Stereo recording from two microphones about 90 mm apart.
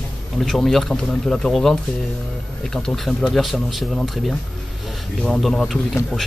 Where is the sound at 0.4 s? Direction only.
5° left (ahead or behind).